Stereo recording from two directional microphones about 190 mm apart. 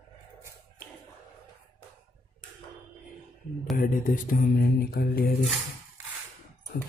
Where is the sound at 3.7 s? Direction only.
45° left (ahead or behind).